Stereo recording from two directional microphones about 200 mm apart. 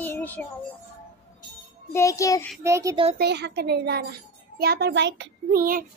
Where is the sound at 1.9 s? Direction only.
15° left (ahead or behind).